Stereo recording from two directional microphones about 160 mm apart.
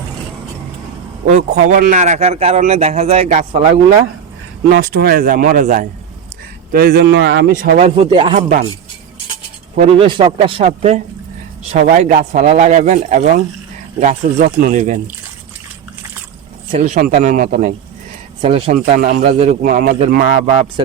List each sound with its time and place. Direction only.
1.3 s speech: 45° right (ahead or behind)
4.7 s a man's voice: 70° right (ahead or behind); by 5.9 s 55° right (ahead or behind)
6.7 s speech: 75° right (ahead or behind)
7.9 s speech: 35° right (ahead or behind)
8.4 s a man's voice: 60° right (ahead or behind)
9.9 s speech: 35° right (ahead or behind); by 14.9 s 50° right (ahead or behind)
16.7 s speech: 50° right (ahead or behind)
18.4 s speech: 35° right (ahead or behind)
18.9 s a man's voice: 60° right (ahead or behind)